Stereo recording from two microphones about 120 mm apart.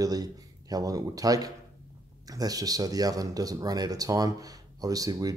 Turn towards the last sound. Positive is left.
turn(degrees=-30)  # may be behind; listen again after turning